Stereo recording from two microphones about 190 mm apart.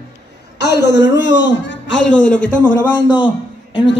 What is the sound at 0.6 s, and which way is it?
A man's voice, 65° left (ahead or behind).